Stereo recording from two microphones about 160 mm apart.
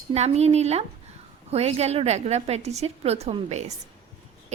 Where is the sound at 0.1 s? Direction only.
40° right (ahead or behind).